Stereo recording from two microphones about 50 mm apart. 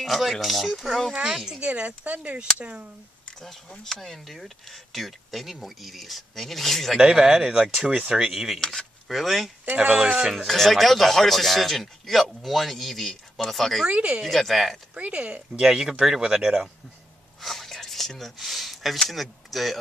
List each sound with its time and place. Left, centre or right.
0.0 s speech: centre
1.1 s speech: centre
1.7 s speech: right
3.8 s speech: centre
7.0 s speech: centre
8.5 s speech: centre
9.0 s speech: centre
13.8 s speech: right
14.2 s speech: centre
15.0 s speech: right
15.6 s speech: centre
17.4 s a sound: centre
18.9 s speech: centre